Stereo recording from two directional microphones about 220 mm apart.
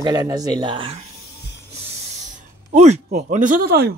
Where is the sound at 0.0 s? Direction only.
20° right (ahead or behind).